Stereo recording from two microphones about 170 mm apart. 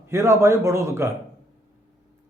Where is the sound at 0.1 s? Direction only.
15° right (ahead or behind).